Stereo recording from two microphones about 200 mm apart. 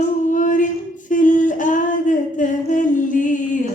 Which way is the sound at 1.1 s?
40° left (ahead or behind).